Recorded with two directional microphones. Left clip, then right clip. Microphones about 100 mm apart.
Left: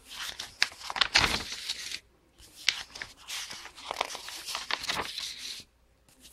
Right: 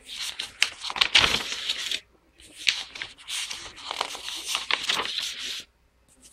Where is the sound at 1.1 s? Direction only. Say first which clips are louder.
Right 7 dB; 60° left (ahead or behind).